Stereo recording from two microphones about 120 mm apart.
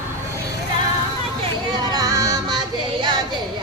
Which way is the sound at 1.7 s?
35° right (ahead or behind).